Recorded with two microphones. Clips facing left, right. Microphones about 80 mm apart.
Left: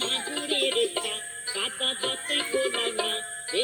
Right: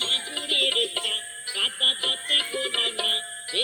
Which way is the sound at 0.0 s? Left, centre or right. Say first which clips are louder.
Left 2 dB; left.